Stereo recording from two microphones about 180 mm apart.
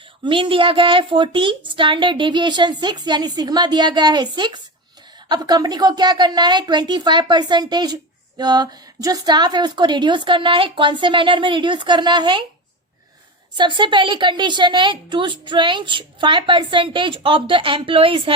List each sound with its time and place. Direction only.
0.3 s a woman's voice: 30° right (ahead or behind)
13.6 s a woman's voice: 25° right (ahead or behind)